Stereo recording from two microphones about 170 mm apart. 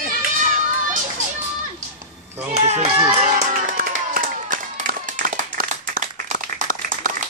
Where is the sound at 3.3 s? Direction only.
55° right (ahead or behind).